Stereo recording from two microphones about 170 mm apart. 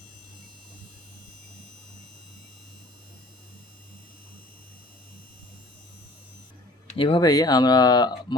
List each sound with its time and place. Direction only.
6.8 s speech: 30° left (ahead or behind)